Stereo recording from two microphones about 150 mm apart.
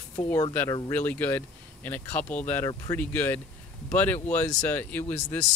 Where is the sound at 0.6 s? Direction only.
25° left (ahead or behind).